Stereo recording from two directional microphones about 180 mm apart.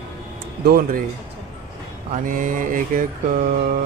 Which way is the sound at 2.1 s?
45° right (ahead or behind).